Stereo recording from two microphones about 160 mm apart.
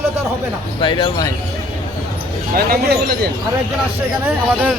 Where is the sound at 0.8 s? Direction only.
30° left (ahead or behind).